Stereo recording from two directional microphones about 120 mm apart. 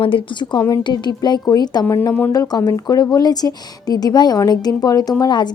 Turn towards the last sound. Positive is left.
turn(degrees=40)  # may be behind; listen again after turning